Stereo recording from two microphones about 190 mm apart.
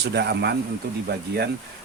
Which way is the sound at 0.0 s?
60° right (ahead or behind).